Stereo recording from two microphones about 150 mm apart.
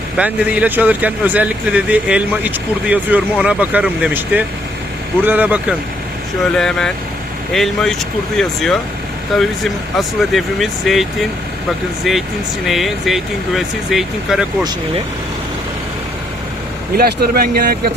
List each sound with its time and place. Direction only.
0.2 s speech: 10° right (ahead or behind)
6.6 s speech: 5° left (ahead or behind)
12.6 s speech: centre (ahead or behind)
17.0 s speech: 90° right